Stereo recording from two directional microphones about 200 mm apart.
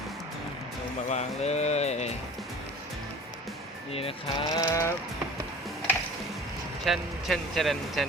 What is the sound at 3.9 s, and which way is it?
Speech, 30° left (ahead or behind).